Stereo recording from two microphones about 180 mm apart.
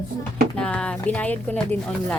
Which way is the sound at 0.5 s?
5° left (ahead or behind).